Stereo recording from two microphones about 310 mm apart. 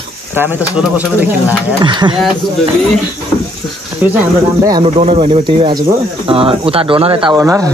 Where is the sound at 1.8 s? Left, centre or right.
Centre.